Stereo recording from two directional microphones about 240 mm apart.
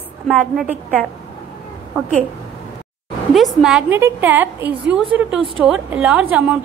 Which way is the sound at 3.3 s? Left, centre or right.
Centre.